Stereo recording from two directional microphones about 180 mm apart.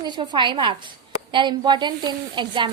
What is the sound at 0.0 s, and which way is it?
A woman's voice, 25° right (ahead or behind).